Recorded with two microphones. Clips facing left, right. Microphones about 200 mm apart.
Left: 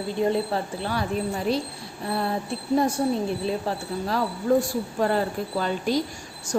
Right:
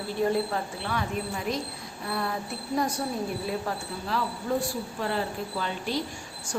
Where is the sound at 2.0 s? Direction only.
30° left (ahead or behind).